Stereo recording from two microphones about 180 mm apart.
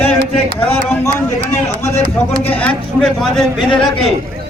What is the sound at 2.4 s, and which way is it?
A man's voice, 10° left (ahead or behind).